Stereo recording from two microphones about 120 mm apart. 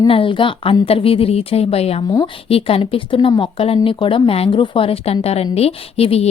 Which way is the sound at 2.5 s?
50° left (ahead or behind).